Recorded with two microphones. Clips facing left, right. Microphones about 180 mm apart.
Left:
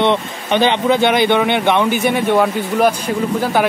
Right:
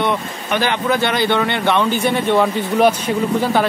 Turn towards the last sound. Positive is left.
turn(degrees=10)  # may be behind; listen again after turning